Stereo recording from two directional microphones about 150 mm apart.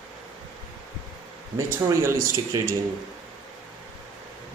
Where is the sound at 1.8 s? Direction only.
15° right (ahead or behind).